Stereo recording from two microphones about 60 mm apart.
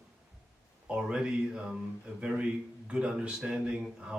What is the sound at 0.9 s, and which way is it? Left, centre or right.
A man's voice, centre.